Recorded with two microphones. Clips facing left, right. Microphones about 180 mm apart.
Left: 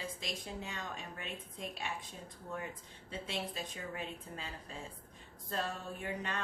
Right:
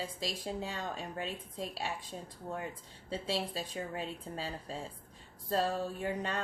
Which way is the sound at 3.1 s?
35° right (ahead or behind).